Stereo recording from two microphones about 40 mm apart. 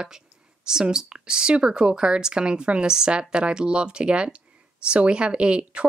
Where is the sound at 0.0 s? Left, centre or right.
Centre.